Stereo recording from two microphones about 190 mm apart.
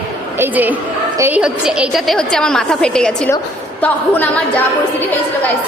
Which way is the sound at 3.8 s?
10° left (ahead or behind).